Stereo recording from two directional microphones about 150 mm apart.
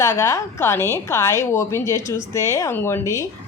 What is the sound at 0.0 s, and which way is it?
A woman's voice, 20° left (ahead or behind).